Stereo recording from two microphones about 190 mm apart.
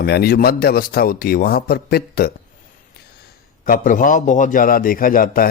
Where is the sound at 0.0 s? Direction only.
55° left (ahead or behind).